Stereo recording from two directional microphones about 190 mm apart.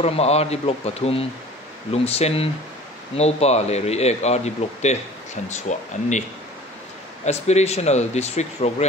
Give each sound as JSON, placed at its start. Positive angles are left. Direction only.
{"t": 0.0, "sound": "speech", "side_deg": 35}
{"t": 7.2, "sound": "speech", "side_deg": 35}